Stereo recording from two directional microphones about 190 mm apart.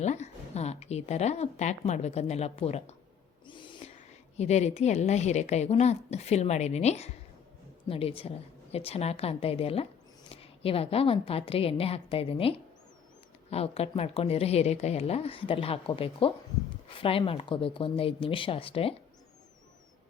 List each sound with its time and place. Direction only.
0.0 s a woman's voice: 35° left (ahead or behind)
3.4 s owl: 25° left (ahead or behind)
4.4 s a woman's voice: 35° left (ahead or behind)